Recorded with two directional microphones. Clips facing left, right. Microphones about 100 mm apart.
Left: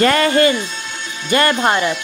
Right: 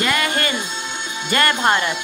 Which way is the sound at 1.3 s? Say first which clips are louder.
Left 3 dB; 25° left (ahead or behind).